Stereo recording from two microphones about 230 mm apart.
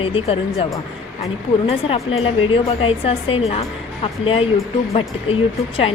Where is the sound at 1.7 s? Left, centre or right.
Left.